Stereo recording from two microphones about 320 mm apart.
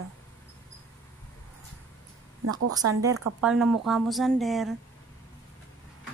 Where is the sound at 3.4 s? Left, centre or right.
Centre.